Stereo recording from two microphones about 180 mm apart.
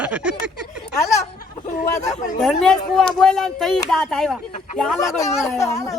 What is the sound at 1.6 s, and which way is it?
Speech, 45° left (ahead or behind).